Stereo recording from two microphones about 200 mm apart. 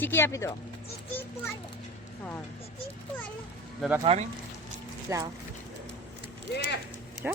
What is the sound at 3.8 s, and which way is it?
Speech, 10° right (ahead or behind).